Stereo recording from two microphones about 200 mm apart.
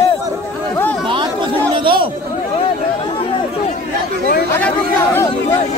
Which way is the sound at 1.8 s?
25° right (ahead or behind).